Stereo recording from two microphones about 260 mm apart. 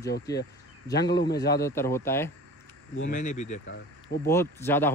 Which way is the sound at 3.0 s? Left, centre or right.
Left.